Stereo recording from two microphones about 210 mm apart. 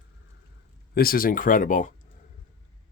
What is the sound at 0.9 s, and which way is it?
Speech, 45° left (ahead or behind).